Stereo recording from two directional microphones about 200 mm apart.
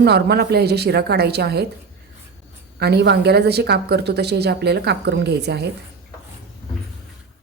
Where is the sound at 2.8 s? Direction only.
55° right (ahead or behind).